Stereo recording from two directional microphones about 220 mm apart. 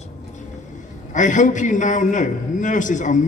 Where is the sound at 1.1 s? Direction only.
35° left (ahead or behind).